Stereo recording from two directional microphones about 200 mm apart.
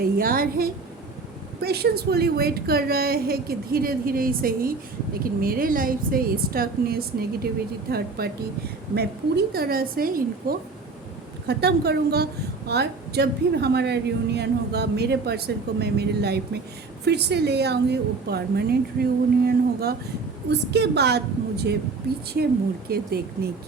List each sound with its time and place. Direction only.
0.0 s a woman's voice: 45° right (ahead or behind)
22.9 s a woman's voice: 50° right (ahead or behind)